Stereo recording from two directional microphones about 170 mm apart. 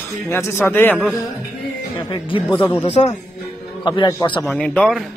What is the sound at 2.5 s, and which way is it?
Speech, 15° left (ahead or behind).